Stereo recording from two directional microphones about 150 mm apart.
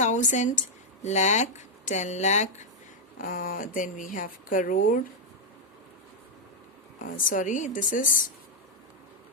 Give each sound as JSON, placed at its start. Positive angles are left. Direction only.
{"t": 0.0, "sound": "a woman's voice", "side_deg": 55}
{"t": 3.2, "sound": "a woman's voice", "side_deg": 70}
{"t": 7.0, "sound": "a woman's voice", "side_deg": 65}